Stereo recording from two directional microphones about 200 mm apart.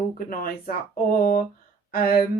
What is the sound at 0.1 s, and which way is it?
Speech, 40° left (ahead or behind).